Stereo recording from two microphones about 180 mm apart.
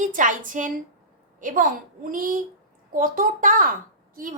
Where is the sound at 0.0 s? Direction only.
45° right (ahead or behind).